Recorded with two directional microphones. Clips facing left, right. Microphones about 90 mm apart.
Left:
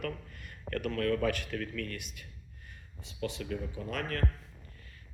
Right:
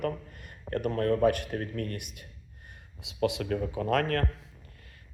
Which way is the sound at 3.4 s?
55° right (ahead or behind).